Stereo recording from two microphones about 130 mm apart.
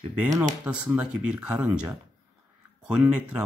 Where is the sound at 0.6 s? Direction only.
10° right (ahead or behind).